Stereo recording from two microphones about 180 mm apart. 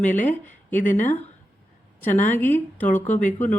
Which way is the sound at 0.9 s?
45° left (ahead or behind).